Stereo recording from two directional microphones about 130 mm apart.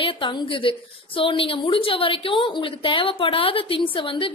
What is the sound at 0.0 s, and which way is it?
A woman's voice, 40° left (ahead or behind).